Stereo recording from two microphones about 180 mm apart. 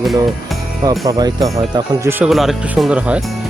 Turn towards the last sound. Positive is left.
turn(degrees=-5)  # may be behind; listen again after turning